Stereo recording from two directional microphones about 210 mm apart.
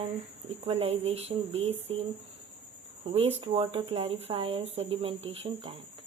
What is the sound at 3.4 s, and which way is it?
Speech, 25° right (ahead or behind).